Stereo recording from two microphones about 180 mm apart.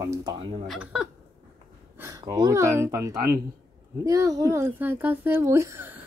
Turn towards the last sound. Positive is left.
turn(degrees=-10)  # may be behind; listen again after turning